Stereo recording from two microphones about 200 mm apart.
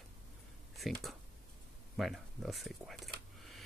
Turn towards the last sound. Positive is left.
turn(degrees=0)  # may be behind; listen again after turning